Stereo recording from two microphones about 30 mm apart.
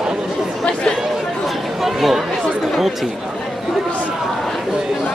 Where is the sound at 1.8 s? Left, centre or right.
Centre.